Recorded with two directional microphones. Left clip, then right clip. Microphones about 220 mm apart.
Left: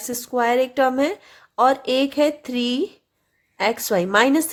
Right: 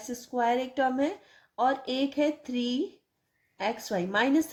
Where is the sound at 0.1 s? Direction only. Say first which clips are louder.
Left 7 dB; 35° left (ahead or behind).